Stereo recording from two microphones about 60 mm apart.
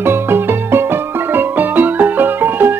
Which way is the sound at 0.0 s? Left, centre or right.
Right.